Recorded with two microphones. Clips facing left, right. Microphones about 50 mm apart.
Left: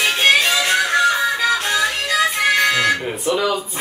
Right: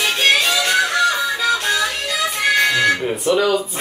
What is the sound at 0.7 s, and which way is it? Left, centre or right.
Music, centre.